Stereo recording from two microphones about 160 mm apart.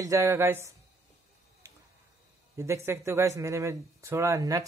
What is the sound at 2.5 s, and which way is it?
A man's voice, 20° right (ahead or behind).